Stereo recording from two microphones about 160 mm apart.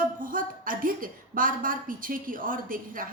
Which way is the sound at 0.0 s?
60° right (ahead or behind).